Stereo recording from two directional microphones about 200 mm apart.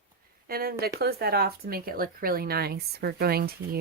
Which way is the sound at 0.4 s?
50° right (ahead or behind).